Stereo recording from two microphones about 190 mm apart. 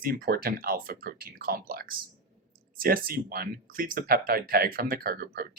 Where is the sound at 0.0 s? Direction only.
50° right (ahead or behind).